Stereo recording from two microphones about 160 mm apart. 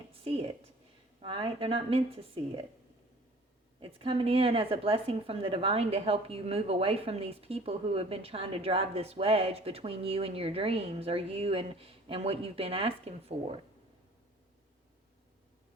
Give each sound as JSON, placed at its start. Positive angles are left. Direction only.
{"t": 0.1, "sound": "a sound", "side_deg": -35}
{"t": 1.2, "sound": "a woman's voice", "side_deg": -35}
{"t": 3.8, "sound": "a woman's voice", "side_deg": -35}